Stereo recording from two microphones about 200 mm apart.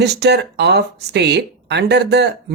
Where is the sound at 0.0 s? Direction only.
55° right (ahead or behind).